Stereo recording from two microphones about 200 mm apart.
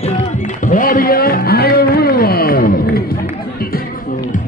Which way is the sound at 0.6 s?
40° left (ahead or behind).